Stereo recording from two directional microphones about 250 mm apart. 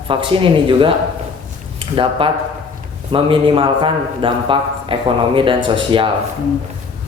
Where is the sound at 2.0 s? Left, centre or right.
Right.